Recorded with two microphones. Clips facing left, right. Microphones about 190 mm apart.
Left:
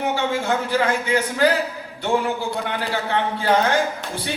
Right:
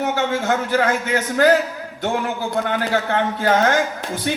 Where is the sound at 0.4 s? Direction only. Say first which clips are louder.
Right 3 dB; 50° right (ahead or behind).